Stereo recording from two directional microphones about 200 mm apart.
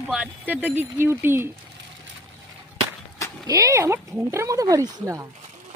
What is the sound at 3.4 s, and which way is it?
Speech, 15° right (ahead or behind).